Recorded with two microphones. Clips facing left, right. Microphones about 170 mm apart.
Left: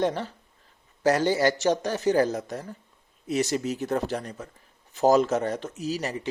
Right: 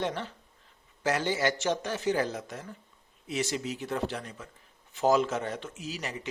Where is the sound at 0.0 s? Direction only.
40° left (ahead or behind).